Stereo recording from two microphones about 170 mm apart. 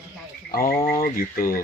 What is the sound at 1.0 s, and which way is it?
Speech, 60° left (ahead or behind).